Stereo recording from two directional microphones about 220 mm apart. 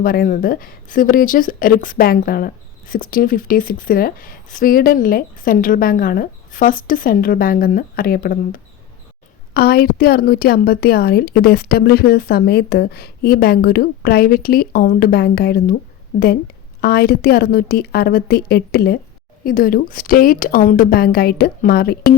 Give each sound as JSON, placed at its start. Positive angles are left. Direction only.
{"t": 0.0, "sound": "a woman's voice", "side_deg": 40}